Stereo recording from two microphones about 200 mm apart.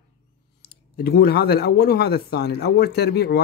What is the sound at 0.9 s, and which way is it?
Speech, 50° left (ahead or behind).